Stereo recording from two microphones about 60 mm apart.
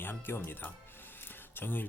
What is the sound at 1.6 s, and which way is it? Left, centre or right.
Speech, left.